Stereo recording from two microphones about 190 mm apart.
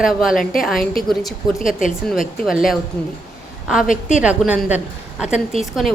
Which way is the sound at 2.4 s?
Centre (ahead or behind).